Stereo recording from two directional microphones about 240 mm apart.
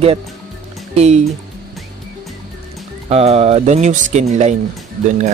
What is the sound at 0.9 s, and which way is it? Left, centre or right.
Speech, right.